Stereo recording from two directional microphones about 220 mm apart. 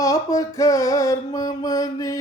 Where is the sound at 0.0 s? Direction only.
15° left (ahead or behind).